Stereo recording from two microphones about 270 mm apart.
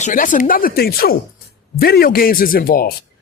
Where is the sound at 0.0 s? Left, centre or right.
Left.